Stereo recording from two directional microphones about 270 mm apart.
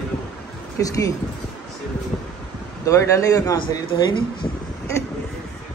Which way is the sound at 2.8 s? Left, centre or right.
Centre.